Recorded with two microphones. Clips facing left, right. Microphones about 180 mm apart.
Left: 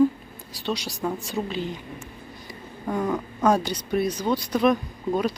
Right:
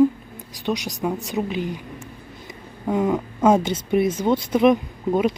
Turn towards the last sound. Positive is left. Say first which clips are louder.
# right 4 dB
turn(degrees=-20)  # may be behind; listen again after turning